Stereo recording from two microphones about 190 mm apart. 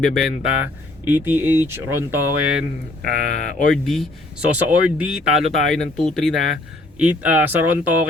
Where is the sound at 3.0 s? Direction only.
45° left (ahead or behind).